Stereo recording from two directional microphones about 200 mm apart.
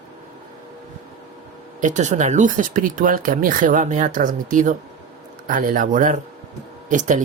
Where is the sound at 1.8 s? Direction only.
35° right (ahead or behind).